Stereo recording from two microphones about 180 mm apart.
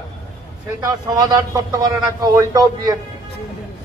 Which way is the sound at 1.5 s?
20° right (ahead or behind).